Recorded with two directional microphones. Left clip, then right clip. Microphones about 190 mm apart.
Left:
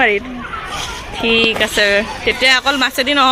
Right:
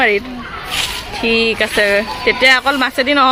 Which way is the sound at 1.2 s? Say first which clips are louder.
Left 1 dB; 10° right (ahead or behind).